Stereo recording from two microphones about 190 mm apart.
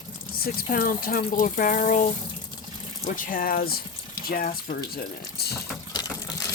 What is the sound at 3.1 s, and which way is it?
Speech, 45° left (ahead or behind).